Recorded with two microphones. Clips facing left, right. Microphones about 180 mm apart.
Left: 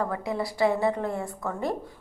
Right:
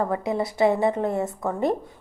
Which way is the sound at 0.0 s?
25° right (ahead or behind).